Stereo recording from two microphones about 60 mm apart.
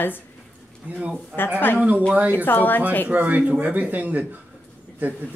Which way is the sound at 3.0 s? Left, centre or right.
Right.